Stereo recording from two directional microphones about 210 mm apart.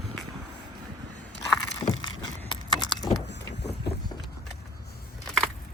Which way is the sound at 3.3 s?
55° left (ahead or behind).